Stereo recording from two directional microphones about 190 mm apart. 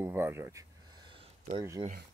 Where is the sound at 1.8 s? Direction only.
25° right (ahead or behind).